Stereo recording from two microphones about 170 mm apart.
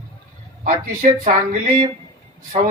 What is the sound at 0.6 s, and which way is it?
Speech, 50° right (ahead or behind).